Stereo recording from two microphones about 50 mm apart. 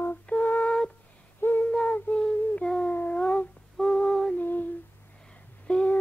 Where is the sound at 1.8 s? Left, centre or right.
Left.